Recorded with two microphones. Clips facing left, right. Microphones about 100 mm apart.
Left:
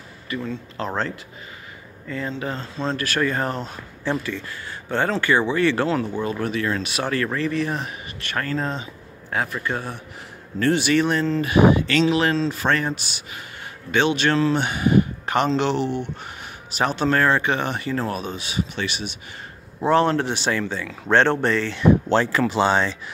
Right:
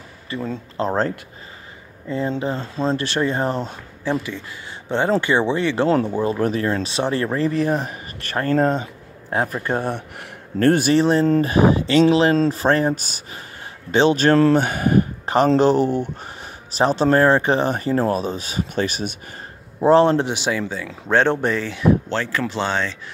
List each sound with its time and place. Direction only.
0.3 s speech: 35° right (ahead or behind)
4.0 s speech: 15° right (ahead or behind)
5.9 s speech: 35° right (ahead or behind)
9.3 s speech: 35° right (ahead or behind)
9.8 s speech: 60° right (ahead or behind); by 11.0 s 45° right (ahead or behind)
11.0 s speech: 30° right (ahead or behind)
15.2 s speech: 35° right (ahead or behind)
19.8 s speech: 30° right (ahead or behind)
20.2 s speech: 10° right (ahead or behind)
22.1 s speech: 15° left (ahead or behind)